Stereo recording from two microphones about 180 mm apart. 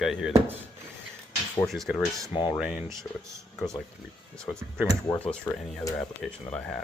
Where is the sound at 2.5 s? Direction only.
5° right (ahead or behind).